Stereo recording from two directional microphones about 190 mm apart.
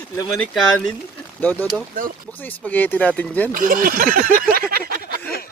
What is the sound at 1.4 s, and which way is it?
Speech, 10° left (ahead or behind).